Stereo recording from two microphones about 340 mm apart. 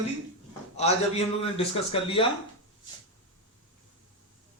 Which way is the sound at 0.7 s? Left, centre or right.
Centre.